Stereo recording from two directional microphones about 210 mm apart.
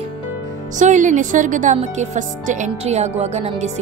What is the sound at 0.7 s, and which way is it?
Speech, 35° right (ahead or behind).